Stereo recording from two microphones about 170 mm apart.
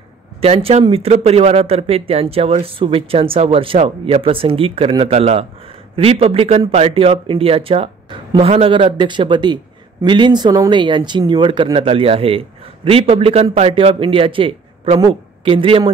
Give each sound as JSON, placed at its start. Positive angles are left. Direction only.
{"t": 0.4, "sound": "speech", "side_deg": -35}